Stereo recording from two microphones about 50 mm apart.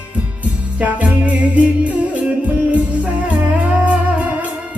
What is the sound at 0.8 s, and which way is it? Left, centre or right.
Music, right.